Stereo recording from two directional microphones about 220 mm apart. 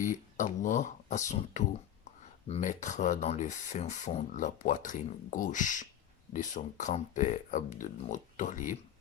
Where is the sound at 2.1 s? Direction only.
30° left (ahead or behind).